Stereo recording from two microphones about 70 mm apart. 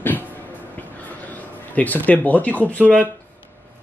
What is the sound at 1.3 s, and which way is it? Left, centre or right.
Speech, left.